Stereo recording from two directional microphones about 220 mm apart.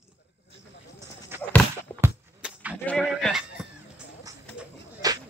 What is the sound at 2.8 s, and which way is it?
Speech, 5° left (ahead or behind).